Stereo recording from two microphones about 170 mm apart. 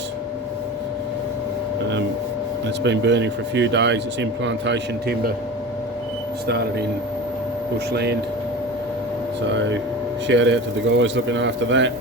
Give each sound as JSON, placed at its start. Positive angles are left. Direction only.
{"t": 2.8, "sound": "speech", "side_deg": -90}
{"t": 6.5, "sound": "speech", "side_deg": -70}
{"t": 7.9, "sound": "speech", "side_deg": -75}
{"t": 9.6, "sound": "speech", "side_deg": -90}